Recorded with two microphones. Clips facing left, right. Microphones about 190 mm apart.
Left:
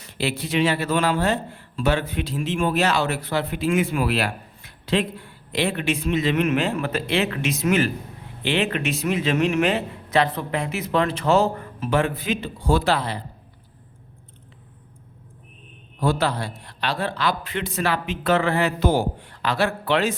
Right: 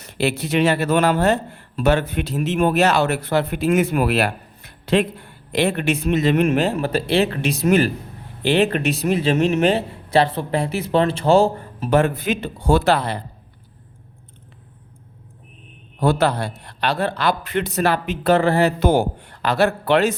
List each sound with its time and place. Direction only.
0.2 s speech: 50° right (ahead or behind); by 3.4 s 65° right (ahead or behind)
3.4 s speech: 45° right (ahead or behind)
11.9 s speech: 45° right (ahead or behind)
12.5 s a man's voice: 65° right (ahead or behind)
16.2 s a man's voice: 65° right (ahead or behind)
17.5 s speech: 40° right (ahead or behind)
18.8 s speech: 65° right (ahead or behind); by 20.1 s 45° right (ahead or behind)